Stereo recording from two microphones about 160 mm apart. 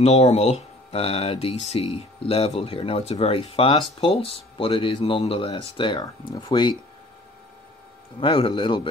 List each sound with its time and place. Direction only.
0.0 s speech: 40° left (ahead or behind)
8.2 s speech: 35° left (ahead or behind)